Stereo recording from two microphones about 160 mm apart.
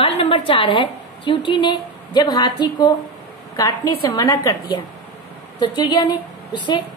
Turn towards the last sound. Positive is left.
turn(degrees=25)  # may be behind; listen again after turning